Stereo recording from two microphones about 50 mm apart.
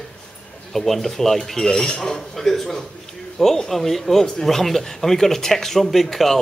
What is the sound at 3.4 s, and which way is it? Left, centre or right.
Speech, centre.